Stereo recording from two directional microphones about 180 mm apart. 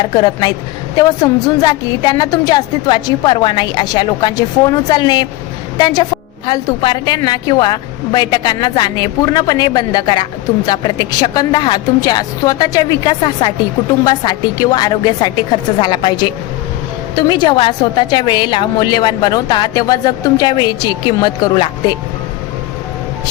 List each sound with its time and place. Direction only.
0.0 s a woman's voice: 20° left (ahead or behind)